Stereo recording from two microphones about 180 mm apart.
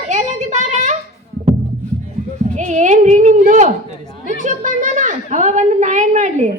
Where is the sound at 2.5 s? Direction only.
40° right (ahead or behind).